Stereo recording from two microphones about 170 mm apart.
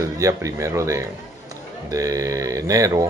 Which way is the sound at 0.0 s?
20° right (ahead or behind).